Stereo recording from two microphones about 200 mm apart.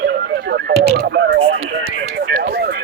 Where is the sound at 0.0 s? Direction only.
65° right (ahead or behind).